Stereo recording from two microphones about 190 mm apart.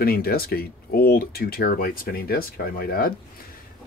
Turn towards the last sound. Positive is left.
turn(degrees=50)  # may be behind; listen again after turning